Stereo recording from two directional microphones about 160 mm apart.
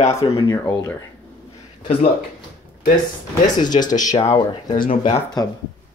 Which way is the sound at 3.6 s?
25° left (ahead or behind).